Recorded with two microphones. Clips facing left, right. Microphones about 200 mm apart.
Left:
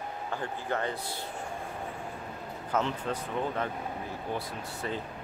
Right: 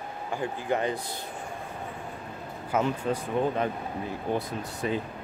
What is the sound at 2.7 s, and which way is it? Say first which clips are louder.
Speech: right 4 dB; 10° right (ahead or behind).